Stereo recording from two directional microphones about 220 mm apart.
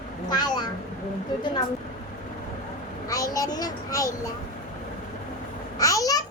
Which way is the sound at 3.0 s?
15° left (ahead or behind).